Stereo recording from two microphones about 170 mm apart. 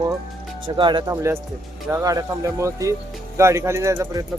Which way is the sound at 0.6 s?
30° right (ahead or behind).